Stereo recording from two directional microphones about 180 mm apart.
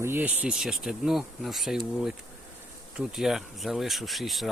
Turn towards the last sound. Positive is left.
turn(degrees=0)  # may be behind; listen again after turning